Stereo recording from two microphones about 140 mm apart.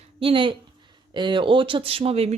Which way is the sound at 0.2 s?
40° right (ahead or behind).